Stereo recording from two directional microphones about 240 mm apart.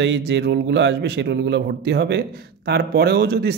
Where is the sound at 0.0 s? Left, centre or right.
Right.